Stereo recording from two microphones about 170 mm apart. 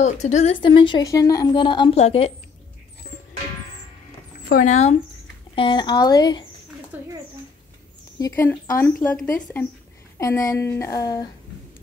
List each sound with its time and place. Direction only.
0.0 s speech: 45° left (ahead or behind)
0.6 s a woman's voice: 30° left (ahead or behind)
2.0 s speech: 35° left (ahead or behind)
4.5 s speech: 55° left (ahead or behind)
5.6 s a woman's voice: 25° left (ahead or behind)
6.9 s speech: 10° right (ahead or behind)
8.2 s a woman's voice: 15° left (ahead or behind)